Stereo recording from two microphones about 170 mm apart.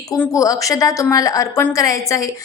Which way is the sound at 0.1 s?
20° left (ahead or behind).